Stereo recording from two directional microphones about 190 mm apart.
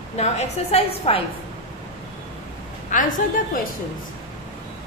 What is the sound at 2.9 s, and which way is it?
Speech, 45° left (ahead or behind).